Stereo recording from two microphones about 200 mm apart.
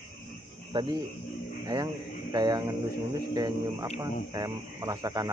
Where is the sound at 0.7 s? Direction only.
25° right (ahead or behind).